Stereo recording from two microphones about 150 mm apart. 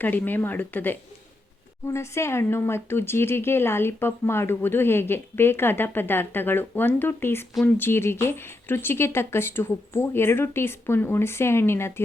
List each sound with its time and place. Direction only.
0.0 s speech: 10° left (ahead or behind)